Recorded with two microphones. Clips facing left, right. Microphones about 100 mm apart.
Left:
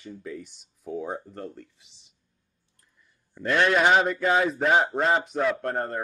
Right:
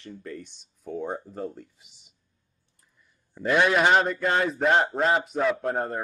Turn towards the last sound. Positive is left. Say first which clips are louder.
# right 1 dB
turn(degrees=-5)  # may be behind; listen again after turning